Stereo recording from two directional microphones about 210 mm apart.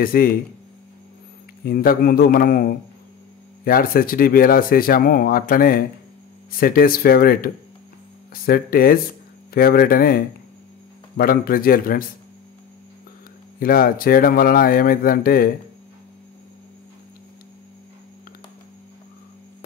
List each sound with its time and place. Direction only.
0.0 s speech: 45° left (ahead or behind)
1.6 s speech: 45° left (ahead or behind)
13.6 s speech: 45° left (ahead or behind)